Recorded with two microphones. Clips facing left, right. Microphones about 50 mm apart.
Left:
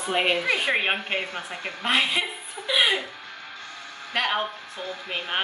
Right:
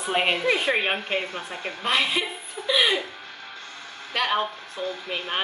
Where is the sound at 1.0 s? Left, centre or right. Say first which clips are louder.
Right 1 dB; left.